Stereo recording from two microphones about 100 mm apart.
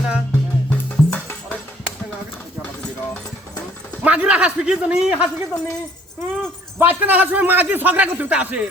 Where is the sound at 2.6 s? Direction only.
10° left (ahead or behind).